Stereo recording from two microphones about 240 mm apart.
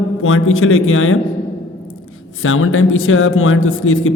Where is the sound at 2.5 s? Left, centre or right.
Left.